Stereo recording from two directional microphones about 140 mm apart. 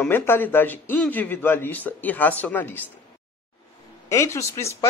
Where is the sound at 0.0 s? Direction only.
15° left (ahead or behind).